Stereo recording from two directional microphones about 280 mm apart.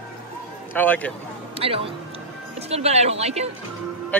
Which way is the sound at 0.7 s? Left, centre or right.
Centre.